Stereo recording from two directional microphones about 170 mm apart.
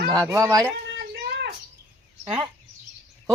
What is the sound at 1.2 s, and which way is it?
Bird, 70° right (ahead or behind).